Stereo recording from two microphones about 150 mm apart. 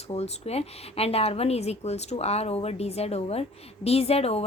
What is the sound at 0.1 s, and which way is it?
Speech, 45° left (ahead or behind).